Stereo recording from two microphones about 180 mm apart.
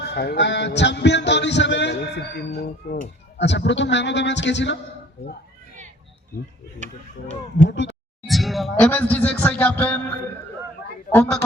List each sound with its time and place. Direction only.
0.0 s a sound: 60° left (ahead or behind)
2.8 s speech: 55° left (ahead or behind)
3.3 s a man's voice: 80° left
8.3 s speech: centre (ahead or behind)
11.1 s a woman's voice: 10° left (ahead or behind)